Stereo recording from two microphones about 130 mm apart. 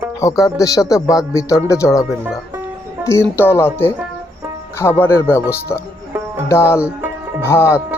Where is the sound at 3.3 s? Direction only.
20° left (ahead or behind).